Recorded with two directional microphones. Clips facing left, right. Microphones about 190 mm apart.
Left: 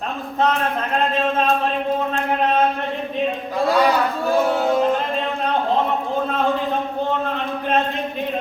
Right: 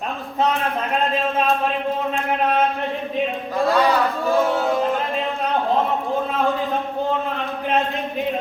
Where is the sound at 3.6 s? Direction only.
15° left (ahead or behind).